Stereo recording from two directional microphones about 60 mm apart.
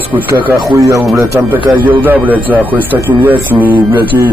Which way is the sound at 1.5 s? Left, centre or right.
Right.